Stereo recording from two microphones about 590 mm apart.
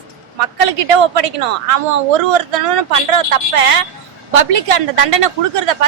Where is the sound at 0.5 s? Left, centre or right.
Right.